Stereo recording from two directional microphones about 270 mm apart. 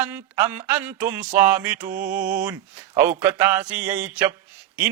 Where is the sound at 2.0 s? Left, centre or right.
Right.